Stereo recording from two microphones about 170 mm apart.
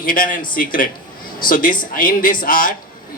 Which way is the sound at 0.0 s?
55° left (ahead or behind).